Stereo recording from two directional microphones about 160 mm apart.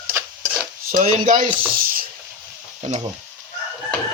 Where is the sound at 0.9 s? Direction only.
55° right (ahead or behind).